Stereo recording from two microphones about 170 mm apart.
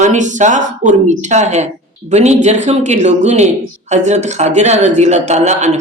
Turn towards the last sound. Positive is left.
turn(degrees=-40)  # may be behind; listen again after turning